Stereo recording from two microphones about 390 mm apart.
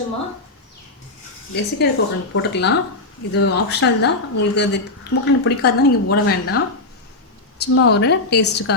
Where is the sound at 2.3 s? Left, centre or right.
Left.